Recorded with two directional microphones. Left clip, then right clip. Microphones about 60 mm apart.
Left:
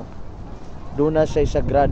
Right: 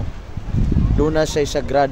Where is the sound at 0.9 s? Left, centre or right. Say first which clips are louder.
Even; right.